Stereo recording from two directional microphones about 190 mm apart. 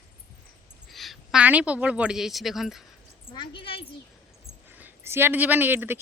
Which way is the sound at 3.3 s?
25° left (ahead or behind).